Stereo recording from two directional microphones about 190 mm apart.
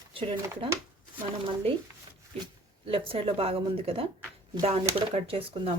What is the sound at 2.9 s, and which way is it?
Speech, 30° right (ahead or behind).